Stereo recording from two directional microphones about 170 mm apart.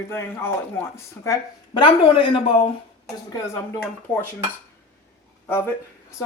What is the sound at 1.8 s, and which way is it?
Speech, 30° left (ahead or behind).